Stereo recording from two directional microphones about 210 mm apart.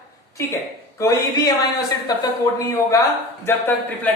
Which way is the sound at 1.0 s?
15° left (ahead or behind).